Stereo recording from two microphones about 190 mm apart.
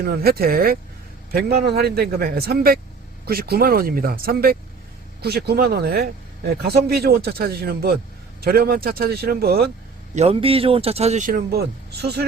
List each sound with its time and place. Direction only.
0.0 s a man's voice: 55° right (ahead or behind)
10.2 s speech: 30° right (ahead or behind)
11.3 s speech: 55° right (ahead or behind)